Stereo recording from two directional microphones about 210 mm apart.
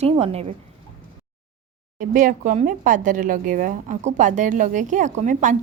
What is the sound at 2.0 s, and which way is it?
Speech, 40° right (ahead or behind).